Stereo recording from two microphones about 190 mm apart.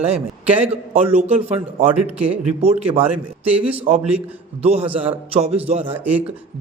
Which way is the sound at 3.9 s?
35° right (ahead or behind).